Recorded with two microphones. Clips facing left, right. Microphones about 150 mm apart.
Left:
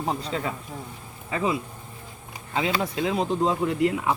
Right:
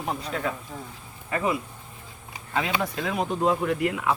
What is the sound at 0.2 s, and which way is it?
Speech, 25° left (ahead or behind).